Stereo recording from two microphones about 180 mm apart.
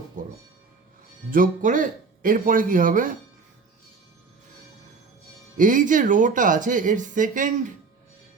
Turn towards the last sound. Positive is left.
turn(degrees=-45)  # may be behind; listen again after turning